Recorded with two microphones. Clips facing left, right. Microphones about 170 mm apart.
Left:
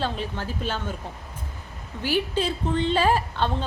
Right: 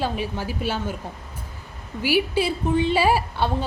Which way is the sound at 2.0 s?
10° right (ahead or behind).